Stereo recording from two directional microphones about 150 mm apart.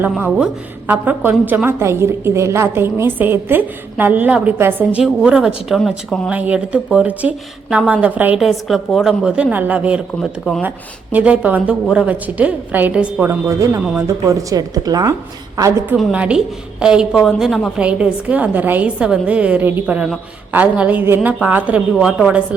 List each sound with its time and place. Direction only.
0.2 s a woman's voice: 5° right (ahead or behind)
10.2 s a woman's voice: centre (ahead or behind)
11.1 s a woman's voice: 10° right (ahead or behind)
13.5 s a woman's voice: 20° right (ahead or behind)
16.0 s a woman's voice: 5° right (ahead or behind)
21.2 s a woman's voice: centre (ahead or behind)
21.9 s a woman's voice: centre (ahead or behind)